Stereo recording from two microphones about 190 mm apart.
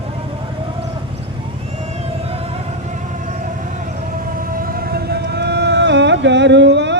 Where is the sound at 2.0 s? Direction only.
30° right (ahead or behind); by 6.9 s 65° right (ahead or behind).